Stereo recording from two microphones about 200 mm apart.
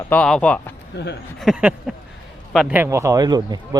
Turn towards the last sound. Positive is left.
turn(degrees=-20)  # may be behind; listen again after turning